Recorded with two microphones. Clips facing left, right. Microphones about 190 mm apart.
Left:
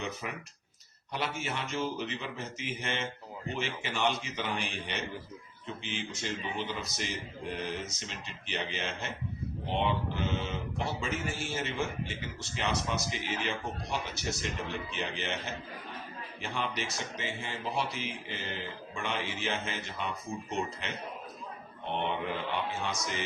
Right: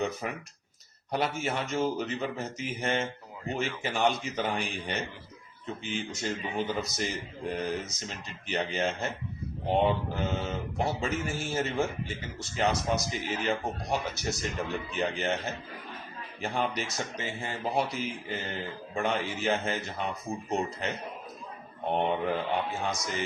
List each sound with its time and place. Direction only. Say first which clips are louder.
0.2 s speech: right 4 dB; 45° right (ahead or behind)